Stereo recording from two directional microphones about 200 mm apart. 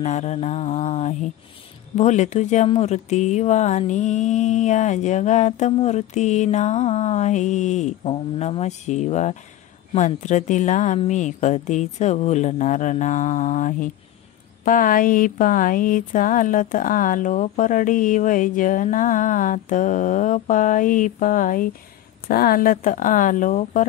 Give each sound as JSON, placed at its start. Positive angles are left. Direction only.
{"t": 0.0, "sound": "speech", "side_deg": 35}